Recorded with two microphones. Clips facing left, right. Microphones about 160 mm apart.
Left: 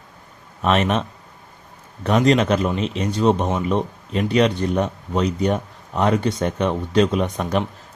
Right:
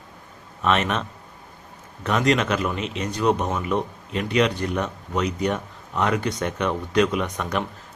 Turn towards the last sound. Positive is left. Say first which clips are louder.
# left 4 dB
turn(degrees=35)  # may be behind; listen again after turning